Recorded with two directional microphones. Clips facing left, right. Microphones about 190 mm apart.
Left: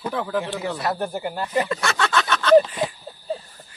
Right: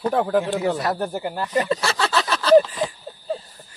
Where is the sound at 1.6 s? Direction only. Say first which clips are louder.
Right 2 dB; 30° right (ahead or behind).